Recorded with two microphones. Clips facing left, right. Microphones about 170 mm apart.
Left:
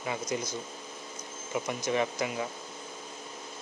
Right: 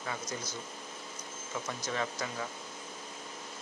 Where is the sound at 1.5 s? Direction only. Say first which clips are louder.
Left 7 dB; 15° left (ahead or behind).